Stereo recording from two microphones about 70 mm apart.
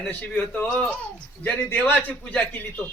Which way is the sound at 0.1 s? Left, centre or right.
Left.